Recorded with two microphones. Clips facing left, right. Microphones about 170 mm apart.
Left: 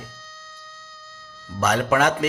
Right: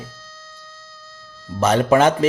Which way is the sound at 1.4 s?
30° right (ahead or behind).